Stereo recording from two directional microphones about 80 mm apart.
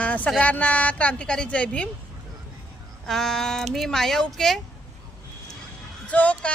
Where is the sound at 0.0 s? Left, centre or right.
Centre.